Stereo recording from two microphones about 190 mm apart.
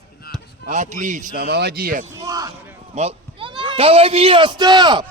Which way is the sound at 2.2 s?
15° right (ahead or behind).